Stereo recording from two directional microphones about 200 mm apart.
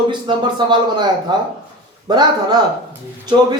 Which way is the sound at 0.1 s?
20° right (ahead or behind).